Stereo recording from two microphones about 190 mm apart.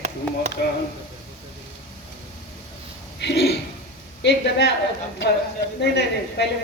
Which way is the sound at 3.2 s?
65° left (ahead or behind).